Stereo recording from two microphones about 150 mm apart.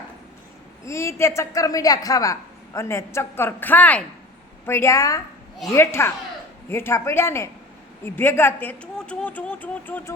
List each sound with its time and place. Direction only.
0.9 s a woman's voice: 20° left (ahead or behind)